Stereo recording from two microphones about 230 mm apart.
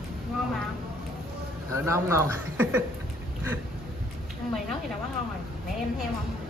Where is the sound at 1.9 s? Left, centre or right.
Centre.